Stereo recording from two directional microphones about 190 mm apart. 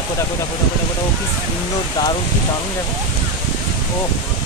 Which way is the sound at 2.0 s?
20° left (ahead or behind).